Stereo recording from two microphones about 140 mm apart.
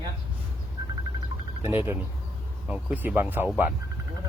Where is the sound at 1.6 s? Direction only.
15° right (ahead or behind).